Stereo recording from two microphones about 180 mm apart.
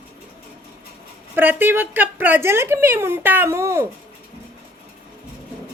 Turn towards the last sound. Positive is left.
turn(degrees=-15)  # may be behind; listen again after turning